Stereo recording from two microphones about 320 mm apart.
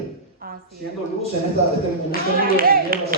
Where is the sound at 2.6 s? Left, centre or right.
Right.